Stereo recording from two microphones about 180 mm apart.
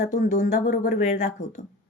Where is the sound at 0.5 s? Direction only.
50° left (ahead or behind).